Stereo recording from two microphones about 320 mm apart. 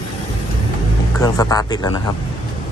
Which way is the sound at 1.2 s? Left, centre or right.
Centre.